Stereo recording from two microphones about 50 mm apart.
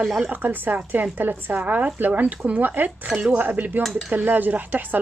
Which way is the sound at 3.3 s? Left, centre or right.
Right.